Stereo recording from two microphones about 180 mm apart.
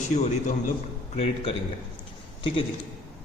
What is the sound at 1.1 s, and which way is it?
Speech, 35° left (ahead or behind).